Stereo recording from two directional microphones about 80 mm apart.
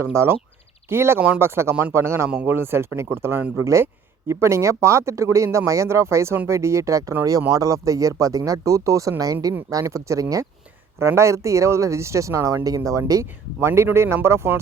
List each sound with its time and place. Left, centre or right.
0.0 s speech: right